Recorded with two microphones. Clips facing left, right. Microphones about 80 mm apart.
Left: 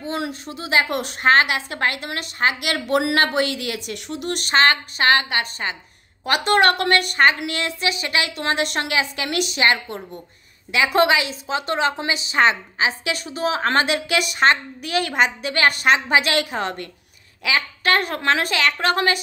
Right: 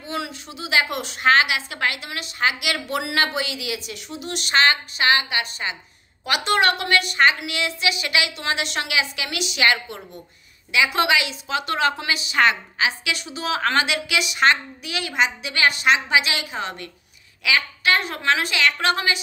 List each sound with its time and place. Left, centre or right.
0.0 s a woman's voice: left
17.4 s a woman's voice: left
17.9 s a woman's voice: left